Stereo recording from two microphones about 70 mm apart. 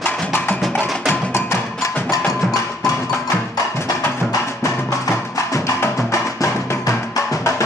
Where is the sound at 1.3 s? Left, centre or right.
Left.